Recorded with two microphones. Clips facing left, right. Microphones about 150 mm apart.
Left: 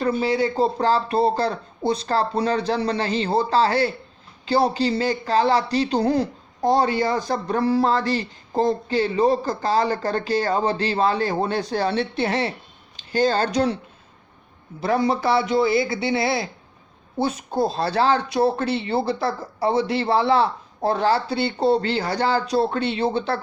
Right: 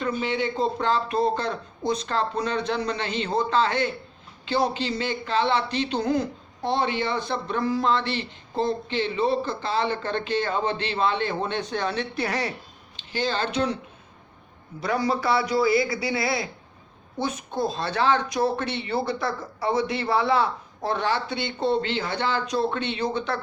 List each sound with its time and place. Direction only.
0.0 s a man's voice: 35° left (ahead or behind)
13.1 s a man's voice: 40° left (ahead or behind)
14.8 s a man's voice: 25° left (ahead or behind)